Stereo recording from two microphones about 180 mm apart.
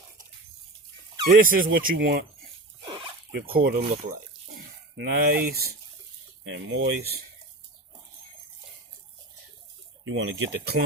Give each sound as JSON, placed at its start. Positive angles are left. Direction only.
{"t": 1.5, "sound": "speech", "side_deg": -50}
{"t": 3.3, "sound": "speech", "side_deg": -60}
{"t": 3.8, "sound": "speech", "side_deg": -45}
{"t": 4.9, "sound": "speech", "side_deg": -55}
{"t": 6.4, "sound": "speech", "side_deg": -90}
{"t": 10.0, "sound": "speech", "side_deg": -90}